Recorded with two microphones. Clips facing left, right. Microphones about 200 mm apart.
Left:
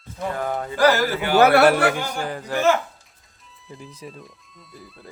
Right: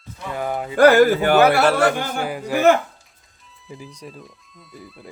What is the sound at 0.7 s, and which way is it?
Speech, 55° right (ahead or behind).